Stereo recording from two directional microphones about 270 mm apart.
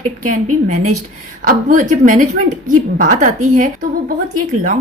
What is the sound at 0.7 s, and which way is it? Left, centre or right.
A woman's voice, right.